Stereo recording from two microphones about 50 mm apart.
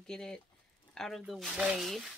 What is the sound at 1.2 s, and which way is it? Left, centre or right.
Speech, centre.